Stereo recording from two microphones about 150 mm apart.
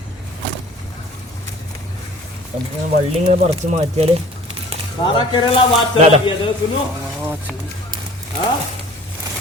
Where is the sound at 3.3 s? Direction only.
45° right (ahead or behind).